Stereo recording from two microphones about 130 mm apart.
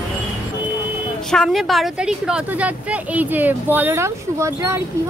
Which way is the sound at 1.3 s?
5° left (ahead or behind).